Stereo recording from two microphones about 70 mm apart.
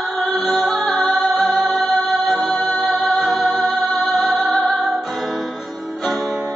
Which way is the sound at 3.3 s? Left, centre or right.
Centre.